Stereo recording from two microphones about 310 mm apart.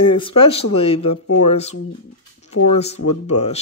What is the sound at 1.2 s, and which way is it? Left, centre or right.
Speech, left.